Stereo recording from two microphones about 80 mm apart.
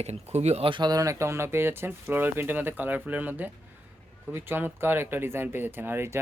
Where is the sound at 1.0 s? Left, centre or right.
Right.